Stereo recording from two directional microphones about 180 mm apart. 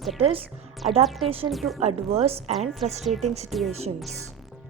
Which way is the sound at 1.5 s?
Centre (ahead or behind).